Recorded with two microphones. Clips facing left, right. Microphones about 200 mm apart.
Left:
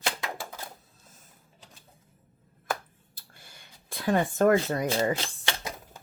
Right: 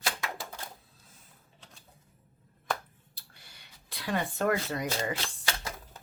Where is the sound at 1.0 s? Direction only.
45° left (ahead or behind).